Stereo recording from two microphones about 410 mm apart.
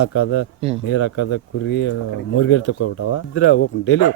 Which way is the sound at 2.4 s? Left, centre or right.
Left.